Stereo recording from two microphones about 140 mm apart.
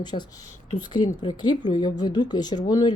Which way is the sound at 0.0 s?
30° left (ahead or behind).